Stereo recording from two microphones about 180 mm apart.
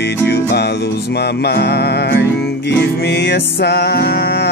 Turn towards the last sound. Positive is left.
turn(degrees=65)  # may be behind; listen again after turning